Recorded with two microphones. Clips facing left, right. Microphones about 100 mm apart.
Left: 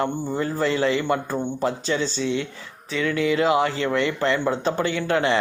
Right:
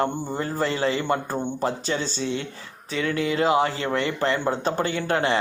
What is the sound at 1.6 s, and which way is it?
Speech, 45° right (ahead or behind).